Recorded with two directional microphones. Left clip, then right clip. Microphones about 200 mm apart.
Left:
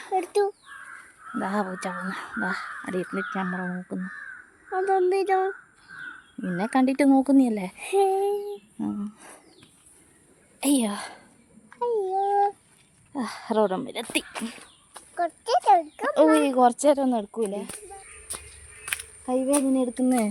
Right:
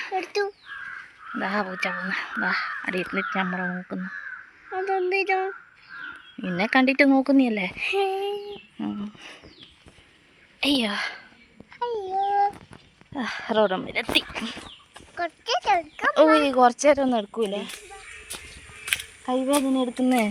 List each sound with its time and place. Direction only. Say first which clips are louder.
1.4 s speech: right 2 dB; 25° left (ahead or behind); by 3.8 s 5° left (ahead or behind)
4.7 s speech: left 2 dB; 65° left (ahead or behind)
6.4 s speech: right 3 dB; 15° left (ahead or behind)
7.8 s speech: left 4 dB; 55° left (ahead or behind)
8.8 s speech: right 1 dB; 10° left (ahead or behind)
10.6 s a woman's voice: right 2 dB; 25° left (ahead or behind)
11.8 s babbling: left 3 dB; 40° left (ahead or behind)
13.1 s speech: right 2 dB; 15° left (ahead or behind)
15.2 s speech: left 2 dB; 30° left (ahead or behind)
16.0 s speech: right 2 dB; 20° left (ahead or behind)
17.0 s speech: right 2 dB; 5° left (ahead or behind)
18.3 s a sound: right 3 dB; centre (ahead or behind)
19.7 s speech: right 1 dB; centre (ahead or behind)